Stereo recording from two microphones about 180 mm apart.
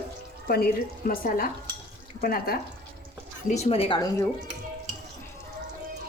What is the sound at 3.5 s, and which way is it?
Speech, 40° left (ahead or behind).